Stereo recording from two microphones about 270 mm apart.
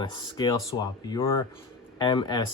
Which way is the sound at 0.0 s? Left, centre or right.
Centre.